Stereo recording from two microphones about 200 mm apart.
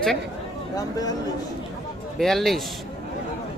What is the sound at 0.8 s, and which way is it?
Speech, 20° left (ahead or behind).